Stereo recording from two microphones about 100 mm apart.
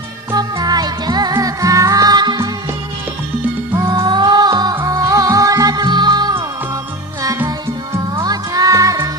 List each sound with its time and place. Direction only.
0.3 s music: 40° right (ahead or behind)
3.8 s music: 40° right (ahead or behind)
8.1 s music: 40° right (ahead or behind)